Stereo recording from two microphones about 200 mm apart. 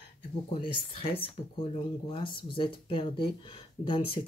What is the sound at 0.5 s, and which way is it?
Speech, 25° left (ahead or behind).